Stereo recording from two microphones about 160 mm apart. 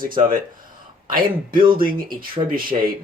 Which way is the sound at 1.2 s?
30° right (ahead or behind).